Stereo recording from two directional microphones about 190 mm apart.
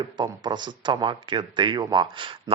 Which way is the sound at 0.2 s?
25° right (ahead or behind).